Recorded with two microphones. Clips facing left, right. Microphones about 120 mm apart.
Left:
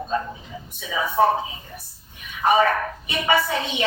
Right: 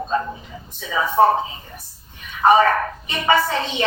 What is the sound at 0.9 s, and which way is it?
Speech, 40° right (ahead or behind).